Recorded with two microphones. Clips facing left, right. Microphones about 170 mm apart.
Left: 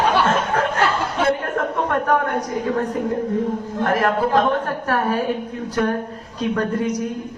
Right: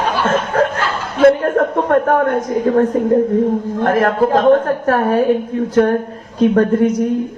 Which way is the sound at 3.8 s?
45° right (ahead or behind).